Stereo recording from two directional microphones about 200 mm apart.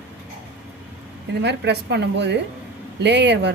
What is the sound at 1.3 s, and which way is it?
A woman's voice, 60° right (ahead or behind).